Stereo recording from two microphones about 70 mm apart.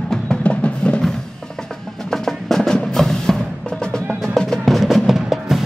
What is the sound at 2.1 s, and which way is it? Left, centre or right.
Music, centre.